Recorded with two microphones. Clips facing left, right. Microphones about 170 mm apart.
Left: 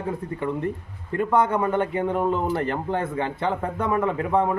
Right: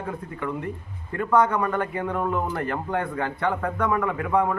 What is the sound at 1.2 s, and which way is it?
A man's voice, 25° left (ahead or behind).